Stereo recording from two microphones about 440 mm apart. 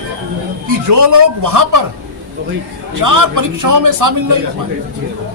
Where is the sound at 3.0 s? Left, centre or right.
Right.